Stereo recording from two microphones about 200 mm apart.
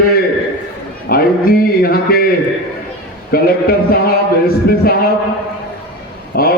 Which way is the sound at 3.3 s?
50° left (ahead or behind).